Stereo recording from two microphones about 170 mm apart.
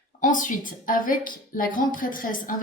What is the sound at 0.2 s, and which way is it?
A woman's voice, 50° left (ahead or behind).